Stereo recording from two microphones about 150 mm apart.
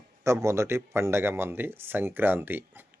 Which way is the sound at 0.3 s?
20° right (ahead or behind).